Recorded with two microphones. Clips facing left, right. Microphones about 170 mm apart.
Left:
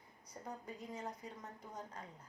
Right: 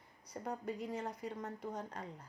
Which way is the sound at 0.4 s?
70° right (ahead or behind).